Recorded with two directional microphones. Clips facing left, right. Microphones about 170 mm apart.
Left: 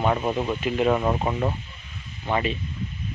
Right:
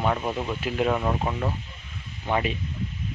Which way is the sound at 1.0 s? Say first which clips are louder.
Left 3 dB; 10° left (ahead or behind).